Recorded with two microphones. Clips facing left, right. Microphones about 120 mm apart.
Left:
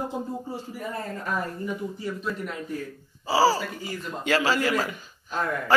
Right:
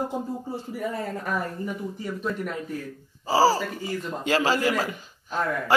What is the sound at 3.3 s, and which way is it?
A man's voice, 40° right (ahead or behind).